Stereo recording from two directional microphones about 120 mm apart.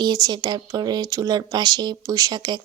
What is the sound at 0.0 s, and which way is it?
Speech, 35° right (ahead or behind).